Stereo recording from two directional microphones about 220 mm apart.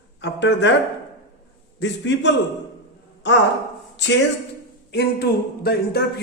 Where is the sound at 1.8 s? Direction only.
55° left (ahead or behind).